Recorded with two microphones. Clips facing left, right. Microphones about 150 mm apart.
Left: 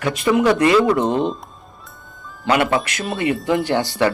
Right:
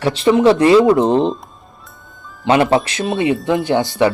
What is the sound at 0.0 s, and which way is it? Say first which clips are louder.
Speech: right 5 dB; 30° right (ahead or behind).